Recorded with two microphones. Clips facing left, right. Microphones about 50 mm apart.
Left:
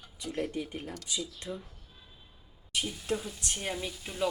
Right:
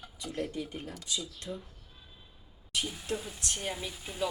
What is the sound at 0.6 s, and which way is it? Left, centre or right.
Speech, centre.